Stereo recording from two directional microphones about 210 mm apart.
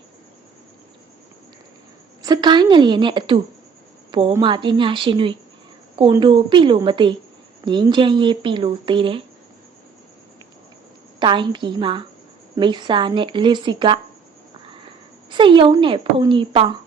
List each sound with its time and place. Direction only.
2.2 s speech: 20° right (ahead or behind)
11.2 s speech: 20° right (ahead or behind)
15.3 s speech: 25° right (ahead or behind)